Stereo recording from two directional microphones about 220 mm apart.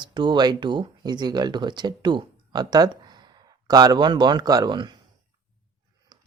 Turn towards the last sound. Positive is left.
turn(degrees=-20)  # may be behind; listen again after turning